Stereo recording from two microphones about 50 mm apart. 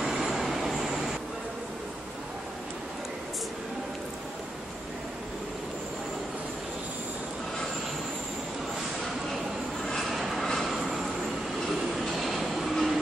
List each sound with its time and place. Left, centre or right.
0.0 s train: centre
10.0 s train: centre
10.7 s vehicle: centre
12.2 s train: centre